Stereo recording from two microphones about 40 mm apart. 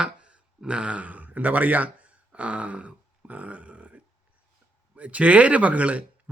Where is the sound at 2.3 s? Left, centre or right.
Right.